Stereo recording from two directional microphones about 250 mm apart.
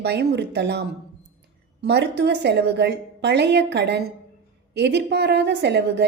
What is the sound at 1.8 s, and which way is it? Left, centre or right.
A woman's voice, right.